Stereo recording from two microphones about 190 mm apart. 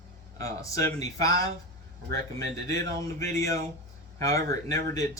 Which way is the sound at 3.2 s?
15° left (ahead or behind).